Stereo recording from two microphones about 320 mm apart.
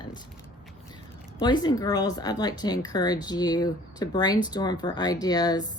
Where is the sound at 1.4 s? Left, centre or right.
Centre.